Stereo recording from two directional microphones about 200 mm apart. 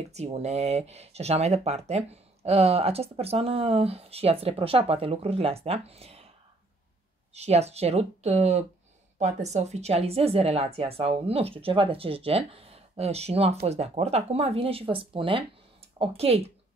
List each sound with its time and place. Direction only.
0.1 s speech: 35° right (ahead or behind)
7.3 s speech: 30° right (ahead or behind)